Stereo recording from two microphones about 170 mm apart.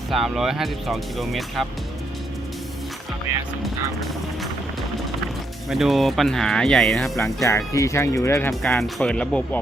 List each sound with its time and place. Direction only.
0.1 s speech: centre (ahead or behind)
5.6 s speech: centre (ahead or behind)
7.4 s speech: 20° left (ahead or behind)
8.6 s speech: 5° left (ahead or behind)